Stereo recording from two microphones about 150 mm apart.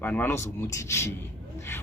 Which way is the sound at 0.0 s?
10° left (ahead or behind).